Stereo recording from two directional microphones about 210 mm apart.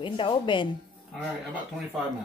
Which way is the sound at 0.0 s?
25° left (ahead or behind).